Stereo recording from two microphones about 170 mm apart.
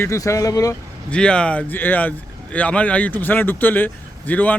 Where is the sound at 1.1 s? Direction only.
5° left (ahead or behind).